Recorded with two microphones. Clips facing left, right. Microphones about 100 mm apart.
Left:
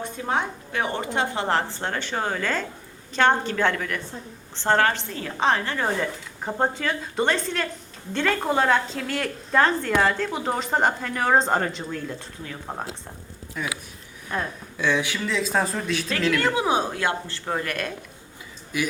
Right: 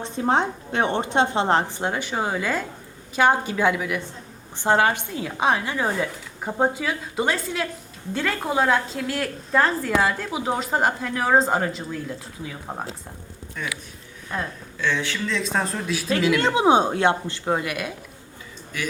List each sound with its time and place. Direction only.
0.2 s a woman's voice: 30° right (ahead or behind); by 12.7 s 5° right (ahead or behind)
13.6 s a woman's voice: 5° left (ahead or behind)
14.8 s speech: 15° left (ahead or behind)
15.4 s a woman's voice: centre (ahead or behind)
16.4 s a woman's voice: 20° right (ahead or behind)